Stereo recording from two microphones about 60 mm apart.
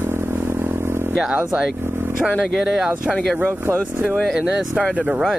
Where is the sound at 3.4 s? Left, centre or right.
Right.